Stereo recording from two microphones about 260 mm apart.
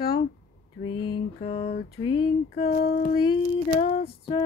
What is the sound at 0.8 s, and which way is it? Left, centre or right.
Female singing, centre.